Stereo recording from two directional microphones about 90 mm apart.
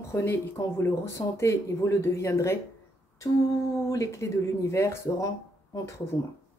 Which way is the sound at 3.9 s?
35° left (ahead or behind).